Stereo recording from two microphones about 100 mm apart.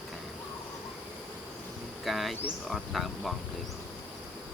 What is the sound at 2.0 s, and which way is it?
Cricket, centre (ahead or behind).